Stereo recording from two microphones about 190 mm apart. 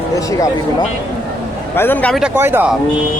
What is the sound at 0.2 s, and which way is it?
Speech, 15° left (ahead or behind).